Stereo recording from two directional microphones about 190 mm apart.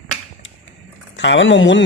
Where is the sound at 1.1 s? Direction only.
70° left (ahead or behind).